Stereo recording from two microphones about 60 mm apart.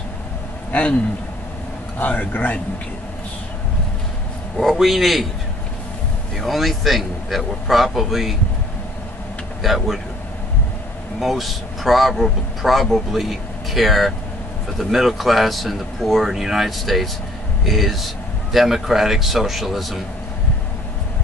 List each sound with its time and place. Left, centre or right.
0.7 s speech: left
2.0 s a man's voice: left
4.6 s speech: centre
6.3 s speech: centre
9.6 s speech: centre
11.1 s speech: centre